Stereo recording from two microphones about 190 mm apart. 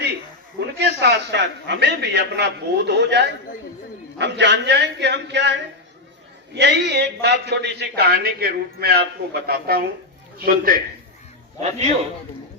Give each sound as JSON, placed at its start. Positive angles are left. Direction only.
{"t": 0.8, "sound": "a man's voice", "side_deg": -65}